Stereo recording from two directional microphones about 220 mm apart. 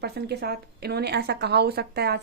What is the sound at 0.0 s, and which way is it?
A woman's voice, 45° right (ahead or behind).